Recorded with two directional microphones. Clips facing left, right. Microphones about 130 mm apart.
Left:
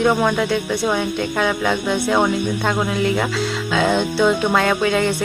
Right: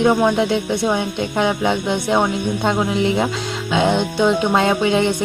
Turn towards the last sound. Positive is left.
turn(degrees=-20)  # may be behind; listen again after turning